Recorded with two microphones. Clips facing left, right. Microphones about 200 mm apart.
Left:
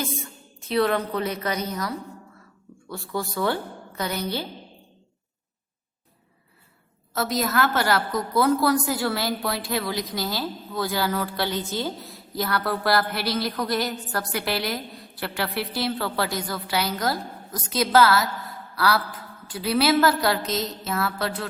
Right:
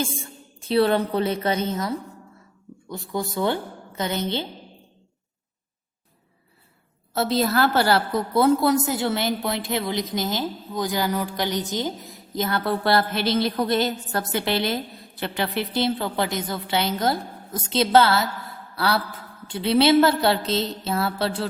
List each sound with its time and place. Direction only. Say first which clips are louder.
0.0 s a woman's voice: right 2 dB; 30° right (ahead or behind)
2.9 s a woman's voice: right 2 dB; 20° right (ahead or behind)
7.1 s a woman's voice: right 3 dB; 30° right (ahead or behind)